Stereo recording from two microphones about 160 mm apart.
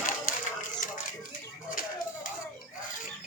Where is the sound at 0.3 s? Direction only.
55° left (ahead or behind).